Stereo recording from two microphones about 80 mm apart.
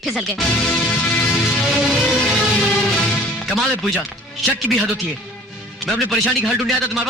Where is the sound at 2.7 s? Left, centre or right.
Centre.